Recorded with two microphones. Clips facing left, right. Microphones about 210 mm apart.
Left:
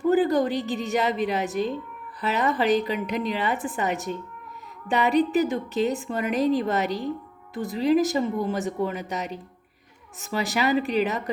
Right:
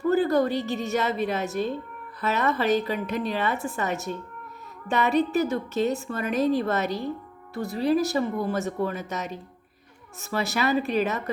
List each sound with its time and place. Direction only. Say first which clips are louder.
0.1 s a woman's voice: left 1 dB; 15° left (ahead or behind)